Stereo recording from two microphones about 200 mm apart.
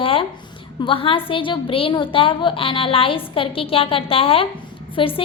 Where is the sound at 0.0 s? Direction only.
25° left (ahead or behind).